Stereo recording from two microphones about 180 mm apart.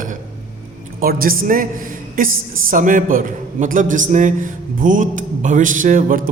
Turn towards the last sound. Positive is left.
turn(degrees=-45)  # may be behind; listen again after turning